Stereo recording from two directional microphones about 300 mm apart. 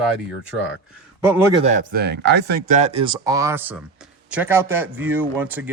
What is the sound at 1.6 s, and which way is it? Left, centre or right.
A man's voice, right.